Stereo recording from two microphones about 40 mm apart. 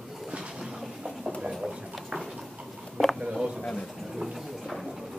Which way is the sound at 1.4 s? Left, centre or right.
Centre.